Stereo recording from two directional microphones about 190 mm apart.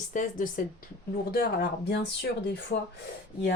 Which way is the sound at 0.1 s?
45° left (ahead or behind).